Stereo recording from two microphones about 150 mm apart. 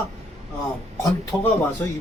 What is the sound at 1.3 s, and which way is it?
Speech, 10° left (ahead or behind).